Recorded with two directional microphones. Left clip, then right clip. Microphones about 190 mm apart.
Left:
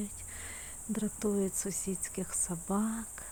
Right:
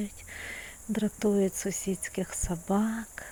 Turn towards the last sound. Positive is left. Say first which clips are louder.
# right 5 dB
turn(degrees=-15)  # may be behind; listen again after turning